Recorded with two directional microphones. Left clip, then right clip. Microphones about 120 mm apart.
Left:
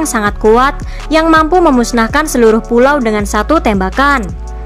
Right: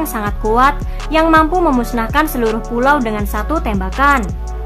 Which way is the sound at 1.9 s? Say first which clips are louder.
Left 4 dB; 50° left (ahead or behind).